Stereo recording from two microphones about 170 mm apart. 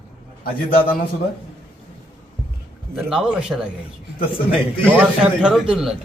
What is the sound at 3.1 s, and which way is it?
Speech, 5° right (ahead or behind).